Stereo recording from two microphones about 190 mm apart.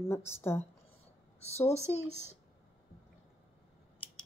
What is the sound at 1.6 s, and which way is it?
Speech, 35° left (ahead or behind).